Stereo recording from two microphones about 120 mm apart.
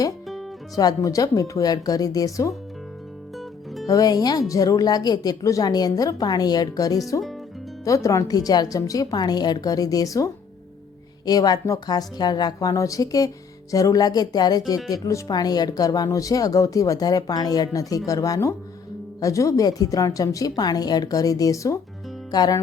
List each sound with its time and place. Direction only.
0.8 s a woman's voice: 30° left (ahead or behind)
3.3 s music: centre (ahead or behind)
3.8 s a woman's voice: 30° left (ahead or behind)